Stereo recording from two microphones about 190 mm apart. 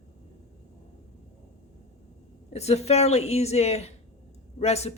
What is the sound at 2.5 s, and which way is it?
A woman's voice, 35° left (ahead or behind).